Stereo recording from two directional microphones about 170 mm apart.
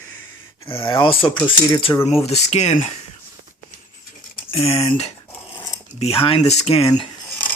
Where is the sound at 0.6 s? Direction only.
30° left (ahead or behind).